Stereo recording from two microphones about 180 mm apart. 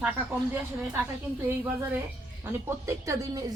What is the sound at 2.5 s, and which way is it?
Speech, 15° right (ahead or behind).